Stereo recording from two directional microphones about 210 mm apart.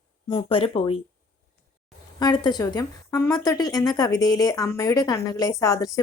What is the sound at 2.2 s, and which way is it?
A woman's voice, 20° left (ahead or behind).